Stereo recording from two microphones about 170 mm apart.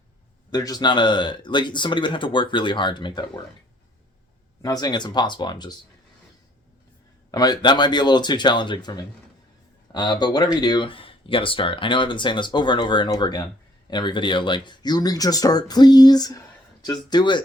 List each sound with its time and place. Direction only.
0.5 s speech: 25° left (ahead or behind)
4.6 s speech: 20° left (ahead or behind)
7.3 s speech: 20° left (ahead or behind)